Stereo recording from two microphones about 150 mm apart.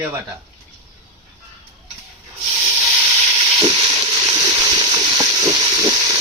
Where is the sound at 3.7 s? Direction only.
35° right (ahead or behind).